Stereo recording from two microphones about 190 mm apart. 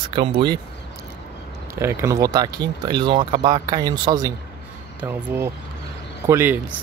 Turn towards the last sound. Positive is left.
turn(degrees=-10)  # may be behind; listen again after turning